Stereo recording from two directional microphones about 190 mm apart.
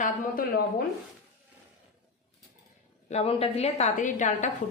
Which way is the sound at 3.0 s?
35° left (ahead or behind).